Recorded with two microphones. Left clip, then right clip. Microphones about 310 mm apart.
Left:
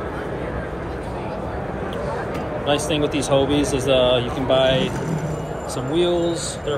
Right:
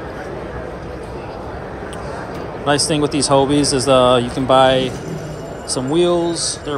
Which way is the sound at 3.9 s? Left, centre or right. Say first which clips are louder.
Right 5 dB; centre.